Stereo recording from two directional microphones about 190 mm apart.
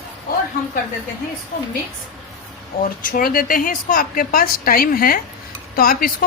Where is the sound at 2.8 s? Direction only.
45° left (ahead or behind).